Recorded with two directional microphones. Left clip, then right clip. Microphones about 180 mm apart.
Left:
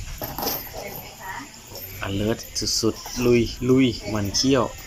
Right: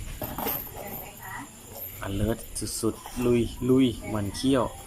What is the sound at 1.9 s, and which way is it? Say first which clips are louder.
Speech: left 5 dB; centre (ahead or behind).